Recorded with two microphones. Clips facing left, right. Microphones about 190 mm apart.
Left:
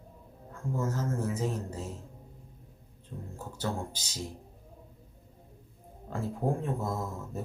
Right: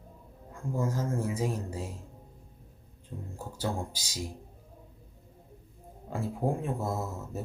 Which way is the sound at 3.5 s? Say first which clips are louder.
Right 1 dB; 10° right (ahead or behind).